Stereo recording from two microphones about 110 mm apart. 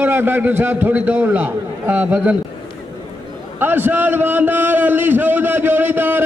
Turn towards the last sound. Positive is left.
turn(degrees=-15)  # may be behind; listen again after turning